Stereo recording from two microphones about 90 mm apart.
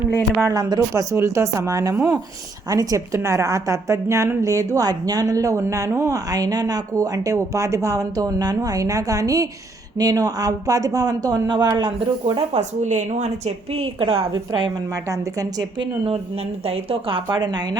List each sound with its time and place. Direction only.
0.5 s a woman's voice: 40° right (ahead or behind)
6.1 s a woman's voice: 40° right (ahead or behind)
11.9 s a woman's voice: 70° right (ahead or behind)
13.7 s a woman's voice: 90° right; by 14.7 s 65° right (ahead or behind)
14.9 s a woman's voice: 35° right (ahead or behind)
16.0 s a woman's voice: 90° right; by 17.7 s 50° right (ahead or behind)